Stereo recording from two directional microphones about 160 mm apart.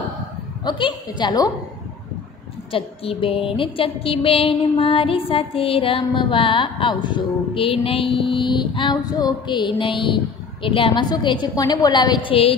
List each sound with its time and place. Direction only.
0.7 s a woman's voice: 30° left (ahead or behind)
2.7 s a sound: 35° left (ahead or behind)
11.4 s a woman's voice: 25° left (ahead or behind)